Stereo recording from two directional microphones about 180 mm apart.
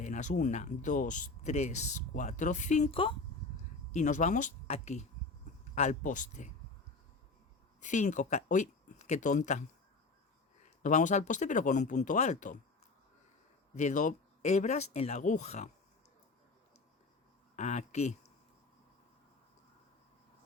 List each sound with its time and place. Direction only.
0.0 s speech: 40° left (ahead or behind)
3.9 s speech: 40° left (ahead or behind)
7.8 s speech: 40° left (ahead or behind)
10.8 s speech: 45° left (ahead or behind)
13.7 s speech: 40° left (ahead or behind)
17.6 s speech: 40° left (ahead or behind)